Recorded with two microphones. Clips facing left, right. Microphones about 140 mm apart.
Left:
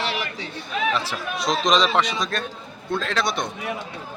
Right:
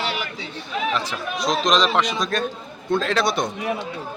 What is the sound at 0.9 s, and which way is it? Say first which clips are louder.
A man's voice: even; centre (ahead or behind).